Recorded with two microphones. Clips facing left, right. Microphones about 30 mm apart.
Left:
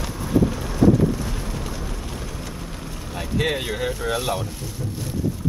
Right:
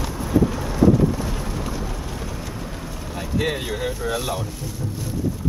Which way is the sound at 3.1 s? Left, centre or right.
Centre.